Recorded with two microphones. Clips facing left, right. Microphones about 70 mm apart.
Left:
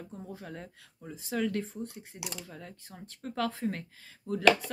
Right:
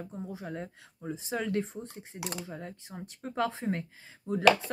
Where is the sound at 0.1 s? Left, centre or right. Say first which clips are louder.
Right 4 dB; centre.